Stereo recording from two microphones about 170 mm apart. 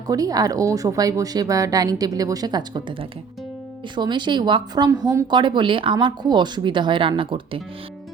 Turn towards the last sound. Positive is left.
turn(degrees=-30)  # may be behind; listen again after turning